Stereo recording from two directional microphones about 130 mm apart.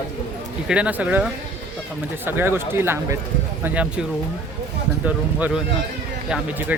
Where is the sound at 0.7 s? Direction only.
10° right (ahead or behind).